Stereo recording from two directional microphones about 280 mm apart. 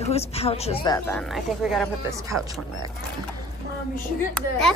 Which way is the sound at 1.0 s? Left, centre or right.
Centre.